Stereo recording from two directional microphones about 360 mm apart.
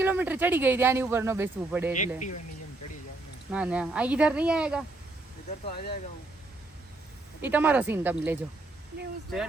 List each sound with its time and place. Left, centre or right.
0.0 s speech: centre
1.9 s speech: centre
3.5 s speech: centre
5.5 s speech: left
7.4 s speech: centre